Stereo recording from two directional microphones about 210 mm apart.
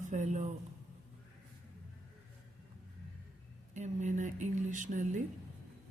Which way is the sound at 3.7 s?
35° right (ahead or behind).